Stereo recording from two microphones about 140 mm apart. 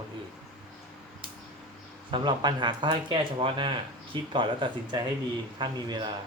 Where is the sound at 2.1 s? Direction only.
30° right (ahead or behind).